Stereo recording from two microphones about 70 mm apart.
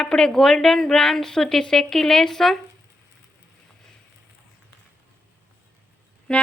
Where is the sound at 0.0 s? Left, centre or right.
Centre.